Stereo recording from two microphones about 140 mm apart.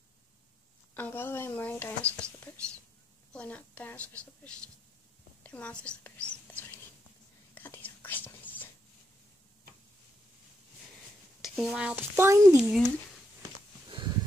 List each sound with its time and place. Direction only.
0.9 s a woman's voice: 15° left (ahead or behind)
7.5 s whispering: 15° left (ahead or behind)
11.4 s speech: 5° right (ahead or behind); by 12.6 s 20° right (ahead or behind)
13.8 s a sound: 35° right (ahead or behind)